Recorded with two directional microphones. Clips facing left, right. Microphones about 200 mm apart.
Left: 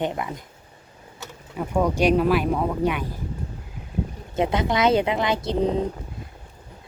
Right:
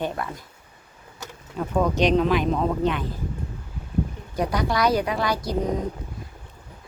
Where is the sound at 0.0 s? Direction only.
15° left (ahead or behind).